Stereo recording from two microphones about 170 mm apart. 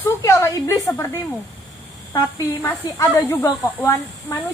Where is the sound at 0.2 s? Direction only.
15° left (ahead or behind).